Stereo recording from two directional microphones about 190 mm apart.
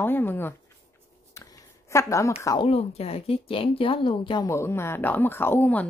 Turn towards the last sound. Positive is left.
turn(degrees=10)  # may be behind; listen again after turning